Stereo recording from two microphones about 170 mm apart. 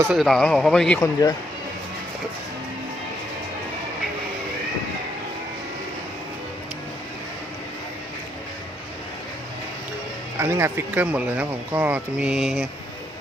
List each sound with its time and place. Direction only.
0.1 s a man's voice: centre (ahead or behind)
1.0 s speech: 20° left (ahead or behind)
10.4 s speech: 15° right (ahead or behind)